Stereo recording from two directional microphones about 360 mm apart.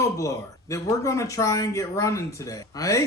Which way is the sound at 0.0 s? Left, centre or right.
Centre.